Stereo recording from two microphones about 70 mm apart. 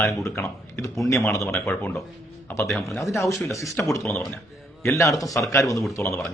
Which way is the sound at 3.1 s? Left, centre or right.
Left.